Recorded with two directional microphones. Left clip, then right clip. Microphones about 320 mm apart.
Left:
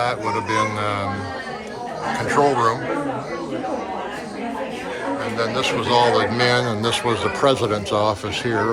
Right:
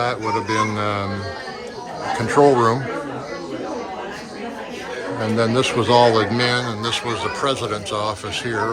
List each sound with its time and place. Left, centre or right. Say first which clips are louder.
0.0 s a man's voice: even; centre
2.1 s speech: right 3 dB; centre
5.4 s a man's voice: right 3 dB; right